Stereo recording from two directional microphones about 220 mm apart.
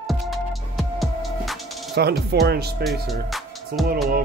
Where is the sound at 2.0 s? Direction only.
50° right (ahead or behind).